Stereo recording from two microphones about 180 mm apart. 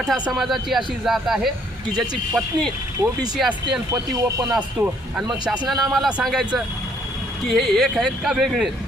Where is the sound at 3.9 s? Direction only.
20° right (ahead or behind).